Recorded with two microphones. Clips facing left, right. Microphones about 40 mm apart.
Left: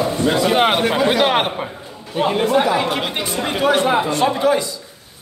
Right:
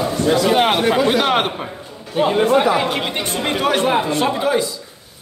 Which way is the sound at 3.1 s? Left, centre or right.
Right.